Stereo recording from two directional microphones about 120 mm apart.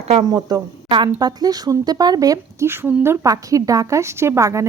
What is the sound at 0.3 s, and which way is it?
Speech, 30° right (ahead or behind).